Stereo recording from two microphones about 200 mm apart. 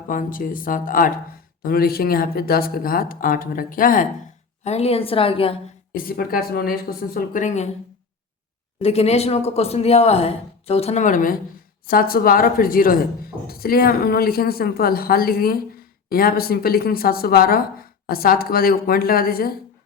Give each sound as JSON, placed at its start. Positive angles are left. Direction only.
{"t": 0.1, "sound": "speech", "side_deg": 45}
{"t": 4.6, "sound": "a woman's voice", "side_deg": 30}
{"t": 5.9, "sound": "speech", "side_deg": 45}
{"t": 8.8, "sound": "speech", "side_deg": 30}